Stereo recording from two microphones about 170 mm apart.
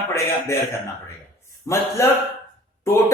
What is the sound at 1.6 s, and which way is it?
Speech, 20° left (ahead or behind).